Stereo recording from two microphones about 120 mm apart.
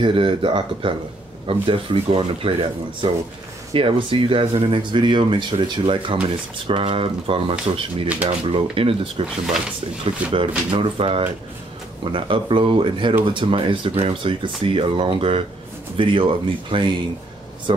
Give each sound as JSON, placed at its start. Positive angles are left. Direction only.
{"t": 0.0, "sound": "speech", "side_deg": -45}